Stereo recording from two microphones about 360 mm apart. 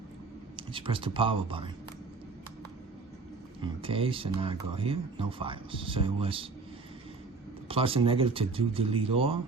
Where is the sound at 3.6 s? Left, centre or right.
Centre.